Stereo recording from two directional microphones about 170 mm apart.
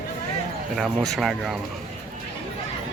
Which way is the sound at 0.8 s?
Centre (ahead or behind).